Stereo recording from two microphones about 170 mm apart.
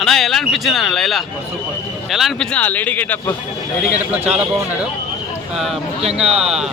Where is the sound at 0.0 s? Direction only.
Centre (ahead or behind).